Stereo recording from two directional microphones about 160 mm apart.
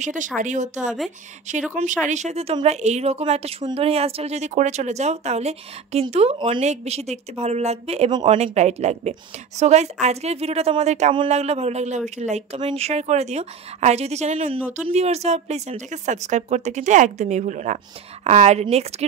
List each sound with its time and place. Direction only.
0.0 s a woman's voice: 50° right (ahead or behind)